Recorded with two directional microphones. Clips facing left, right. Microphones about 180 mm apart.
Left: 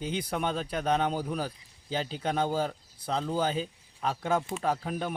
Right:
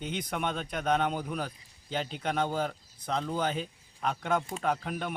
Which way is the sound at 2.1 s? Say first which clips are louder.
Left 1 dB; 30° left (ahead or behind).